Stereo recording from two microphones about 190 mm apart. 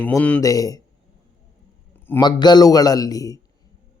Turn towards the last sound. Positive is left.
turn(degrees=20)  # may be behind; listen again after turning